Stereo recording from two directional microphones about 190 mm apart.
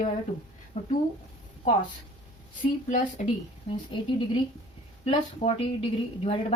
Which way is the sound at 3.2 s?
35° left (ahead or behind).